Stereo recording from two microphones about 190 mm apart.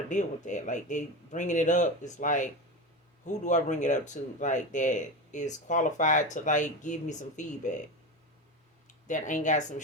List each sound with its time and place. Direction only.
0.1 s speech: 40° left (ahead or behind)
9.0 s speech: 40° left (ahead or behind)